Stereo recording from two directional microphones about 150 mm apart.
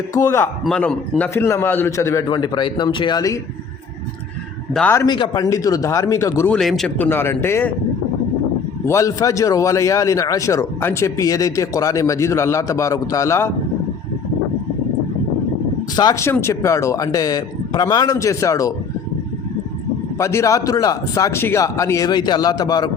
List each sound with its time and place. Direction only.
0.1 s a man's voice: 20° left (ahead or behind)
0.6 s a man's voice: 5° left (ahead or behind)
1.2 s a man's voice: 20° left (ahead or behind)
5.0 s a man's voice: 30° left (ahead or behind)
6.5 s speech: centre (ahead or behind)
8.9 s a man's voice: 20° left (ahead or behind)
16.0 s a man's voice: 25° left (ahead or behind)
20.1 s a man's voice: 20° left (ahead or behind)